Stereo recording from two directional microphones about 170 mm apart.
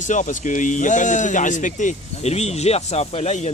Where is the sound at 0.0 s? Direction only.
45° left (ahead or behind).